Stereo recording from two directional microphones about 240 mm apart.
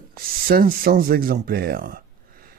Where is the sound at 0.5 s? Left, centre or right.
Right.